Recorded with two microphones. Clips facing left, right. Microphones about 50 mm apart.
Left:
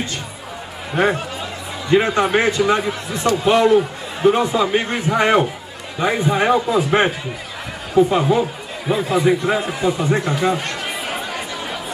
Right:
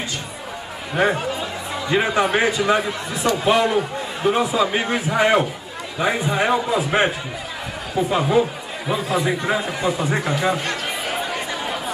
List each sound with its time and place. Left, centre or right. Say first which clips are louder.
0.9 s a man's voice: left 1 dB; centre
8.3 s a man's voice: even; centre